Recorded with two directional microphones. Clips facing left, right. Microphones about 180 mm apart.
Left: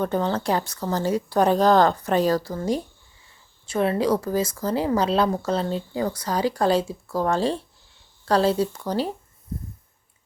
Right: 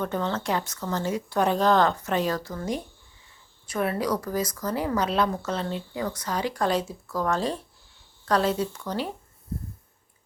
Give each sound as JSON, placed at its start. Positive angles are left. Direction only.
{"t": 0.0, "sound": "a woman's voice", "side_deg": 35}